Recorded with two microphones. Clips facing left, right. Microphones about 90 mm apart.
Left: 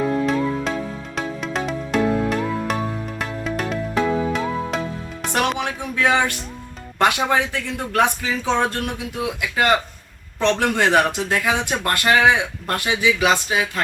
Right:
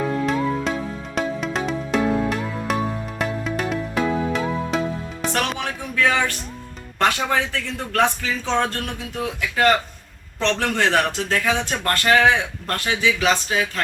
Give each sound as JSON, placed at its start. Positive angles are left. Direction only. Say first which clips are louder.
{"t": 0.7, "sound": "music", "louder": "even", "side_deg": 0}
{"t": 5.3, "sound": "a sound", "louder": "left 4 dB", "side_deg": 15}
{"t": 7.0, "sound": "speech", "louder": "left 2 dB", "side_deg": 15}